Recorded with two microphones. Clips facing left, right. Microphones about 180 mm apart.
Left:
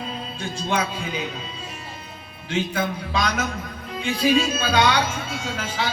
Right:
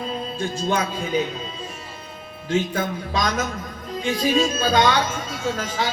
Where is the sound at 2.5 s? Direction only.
40° right (ahead or behind).